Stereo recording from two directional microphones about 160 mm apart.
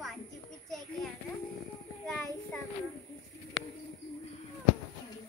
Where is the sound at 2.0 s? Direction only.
10° left (ahead or behind).